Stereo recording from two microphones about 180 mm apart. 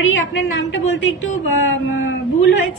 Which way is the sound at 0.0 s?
90° left.